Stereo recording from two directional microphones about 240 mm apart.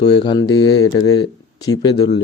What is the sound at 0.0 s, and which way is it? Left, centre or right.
Speech, centre.